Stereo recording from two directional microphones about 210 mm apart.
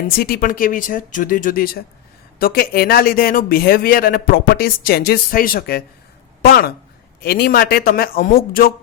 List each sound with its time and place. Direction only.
0.2 s a man's voice: 45° left (ahead or behind)